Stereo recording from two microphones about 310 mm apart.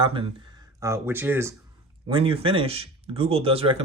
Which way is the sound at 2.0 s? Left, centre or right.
Centre.